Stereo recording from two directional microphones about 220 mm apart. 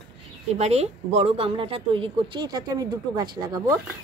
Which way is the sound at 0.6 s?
30° right (ahead or behind).